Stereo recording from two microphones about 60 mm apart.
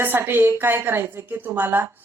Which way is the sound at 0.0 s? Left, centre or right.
Right.